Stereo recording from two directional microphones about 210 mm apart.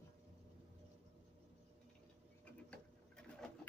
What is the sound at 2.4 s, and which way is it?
Printer, 5° left (ahead or behind).